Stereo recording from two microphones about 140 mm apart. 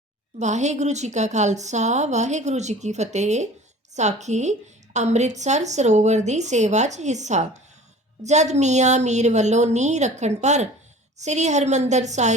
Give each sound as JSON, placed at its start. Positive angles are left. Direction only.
{"t": 0.3, "sound": "a woman's voice", "side_deg": -55}